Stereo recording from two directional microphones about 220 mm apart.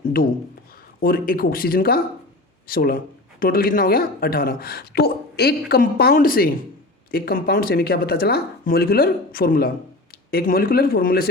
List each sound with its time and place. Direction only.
0.0 s speech: 40° left (ahead or behind)